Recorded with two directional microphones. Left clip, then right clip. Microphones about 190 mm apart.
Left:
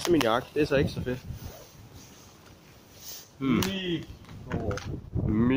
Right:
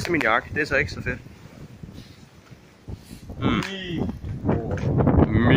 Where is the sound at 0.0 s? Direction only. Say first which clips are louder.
Right 3 dB; 15° left (ahead or behind).